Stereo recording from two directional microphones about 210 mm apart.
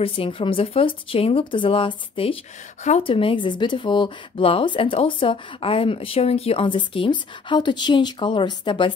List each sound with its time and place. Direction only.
0.0 s speech: 25° left (ahead or behind)